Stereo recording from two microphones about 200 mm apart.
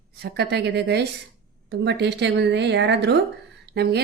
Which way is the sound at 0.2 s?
55° right (ahead or behind).